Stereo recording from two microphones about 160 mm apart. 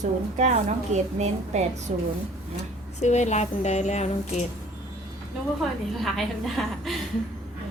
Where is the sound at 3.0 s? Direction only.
45° left (ahead or behind).